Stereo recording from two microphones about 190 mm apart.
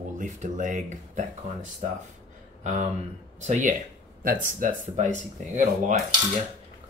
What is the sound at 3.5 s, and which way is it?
Speech, 40° right (ahead or behind).